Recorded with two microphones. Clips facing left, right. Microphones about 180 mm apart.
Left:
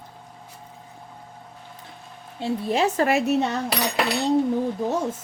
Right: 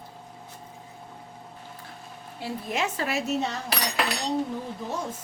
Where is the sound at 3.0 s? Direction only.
60° left (ahead or behind).